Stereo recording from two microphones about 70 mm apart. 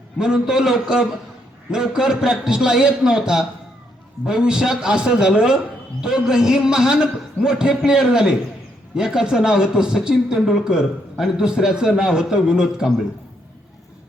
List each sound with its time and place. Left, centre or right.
0.2 s speech: centre